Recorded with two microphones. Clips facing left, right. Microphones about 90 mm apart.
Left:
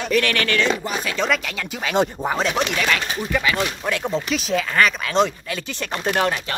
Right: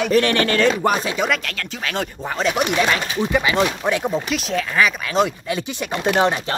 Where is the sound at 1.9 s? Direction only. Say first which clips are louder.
Left 8 dB; 25° left (ahead or behind).